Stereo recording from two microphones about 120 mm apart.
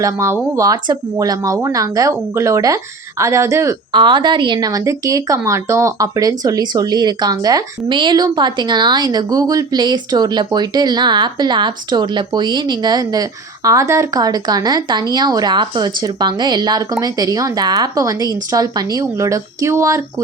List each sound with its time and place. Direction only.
0.0 s speech: 25° right (ahead or behind)
3.9 s speech: 40° right (ahead or behind); by 20.2 s 25° right (ahead or behind)